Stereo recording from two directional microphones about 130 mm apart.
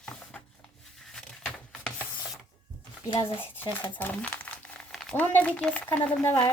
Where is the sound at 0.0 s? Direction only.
5° left (ahead or behind).